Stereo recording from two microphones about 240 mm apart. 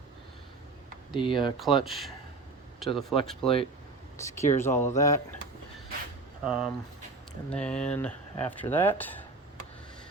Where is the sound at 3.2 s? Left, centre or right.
Centre.